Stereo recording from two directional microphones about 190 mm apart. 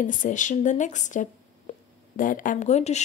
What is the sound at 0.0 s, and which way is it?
A woman's voice, 45° left (ahead or behind).